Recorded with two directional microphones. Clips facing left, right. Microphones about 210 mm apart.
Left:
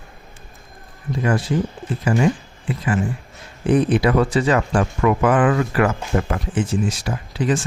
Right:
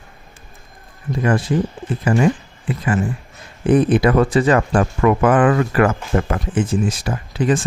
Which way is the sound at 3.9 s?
50° right (ahead or behind).